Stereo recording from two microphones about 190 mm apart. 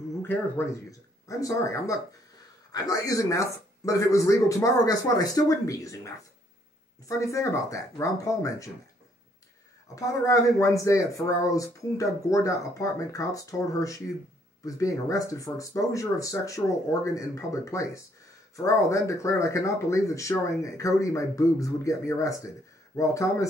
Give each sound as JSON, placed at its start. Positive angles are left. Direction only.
{"t": 0.2, "sound": "speech", "side_deg": 10}
{"t": 9.9, "sound": "speech", "side_deg": 15}